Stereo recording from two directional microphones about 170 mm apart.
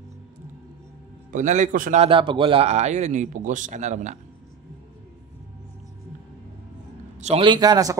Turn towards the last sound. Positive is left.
turn(degrees=-20)  # may be behind; listen again after turning